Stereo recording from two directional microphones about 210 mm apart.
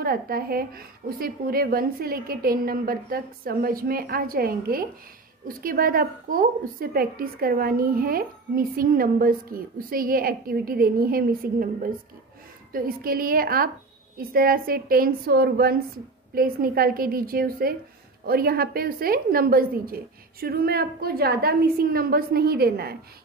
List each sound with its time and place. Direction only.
0.0 s a woman's voice: 45° right (ahead or behind)